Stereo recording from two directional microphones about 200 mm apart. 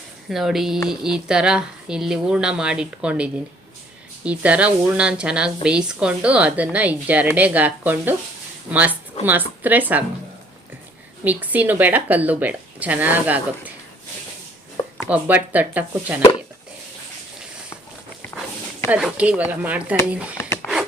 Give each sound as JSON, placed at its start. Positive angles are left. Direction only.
{"t": 0.3, "sound": "speech", "side_deg": 0}
{"t": 11.2, "sound": "speech", "side_deg": -10}
{"t": 14.8, "sound": "a sound", "side_deg": 25}
{"t": 15.1, "sound": "speech", "side_deg": -10}
{"t": 18.9, "sound": "speech", "side_deg": -5}
{"t": 20.4, "sound": "a sound", "side_deg": 10}